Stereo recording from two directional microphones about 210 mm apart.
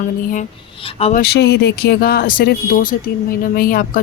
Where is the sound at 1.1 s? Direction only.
50° left (ahead or behind).